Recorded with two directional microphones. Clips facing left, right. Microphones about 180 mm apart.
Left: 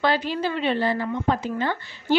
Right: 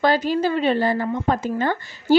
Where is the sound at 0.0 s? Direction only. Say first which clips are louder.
Right 4 dB; 45° right (ahead or behind).